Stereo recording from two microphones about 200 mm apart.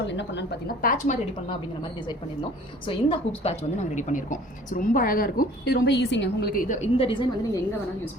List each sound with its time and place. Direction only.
0.1 s a woman's voice: 60° left (ahead or behind)
0.8 s a woman's voice: 40° left (ahead or behind)
1.5 s a woman's voice: 25° left (ahead or behind); by 6.9 s 45° left (ahead or behind)
6.9 s a woman's voice: 25° left (ahead or behind)